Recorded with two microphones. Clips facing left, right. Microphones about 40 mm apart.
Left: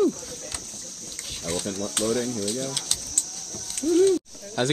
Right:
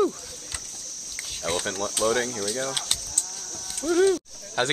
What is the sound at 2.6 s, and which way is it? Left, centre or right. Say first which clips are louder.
Speech: right 2 dB; right.